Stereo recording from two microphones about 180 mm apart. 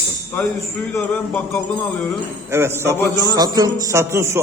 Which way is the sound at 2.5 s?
15° right (ahead or behind).